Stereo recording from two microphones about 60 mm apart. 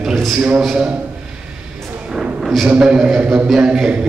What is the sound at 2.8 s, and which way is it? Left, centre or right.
A man's voice, centre.